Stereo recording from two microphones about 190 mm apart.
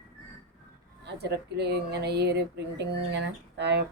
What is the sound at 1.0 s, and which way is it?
Speech, 60° right (ahead or behind).